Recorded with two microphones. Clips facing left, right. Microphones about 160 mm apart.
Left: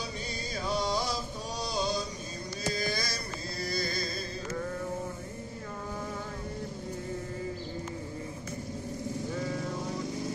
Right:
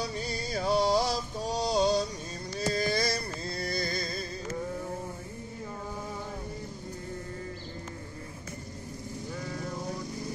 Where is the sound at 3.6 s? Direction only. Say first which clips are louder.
Even; 55° right (ahead or behind).